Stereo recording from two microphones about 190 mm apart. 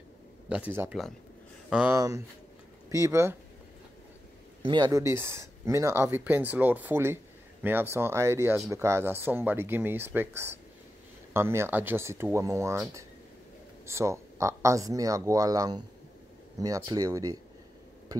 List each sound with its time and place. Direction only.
0.5 s speech: 10° right (ahead or behind)
2.0 s speech: 15° right (ahead or behind)
4.6 s speech: 20° right (ahead or behind)